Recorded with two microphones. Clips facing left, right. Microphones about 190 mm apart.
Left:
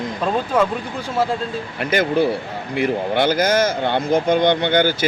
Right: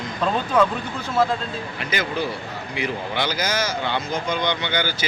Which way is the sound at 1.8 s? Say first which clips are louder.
Left 9 dB; 55° left (ahead or behind).